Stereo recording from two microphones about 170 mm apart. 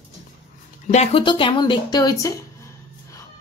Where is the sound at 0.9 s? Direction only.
40° left (ahead or behind); by 2.3 s 20° left (ahead or behind).